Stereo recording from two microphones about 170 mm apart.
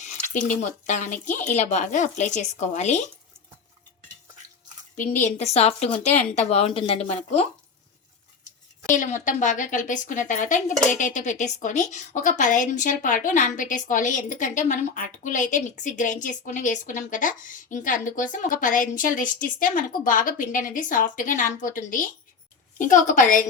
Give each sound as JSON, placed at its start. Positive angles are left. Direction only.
{"t": 0.0, "sound": "a woman's voice", "side_deg": 50}
{"t": 5.2, "sound": "a woman's voice", "side_deg": 40}
{"t": 9.0, "sound": "a woman's voice", "side_deg": 50}